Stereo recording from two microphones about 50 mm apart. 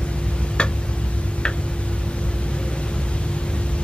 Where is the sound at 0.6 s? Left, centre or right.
Left.